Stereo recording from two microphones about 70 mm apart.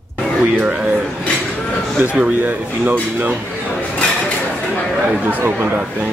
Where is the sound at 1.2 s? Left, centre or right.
Centre.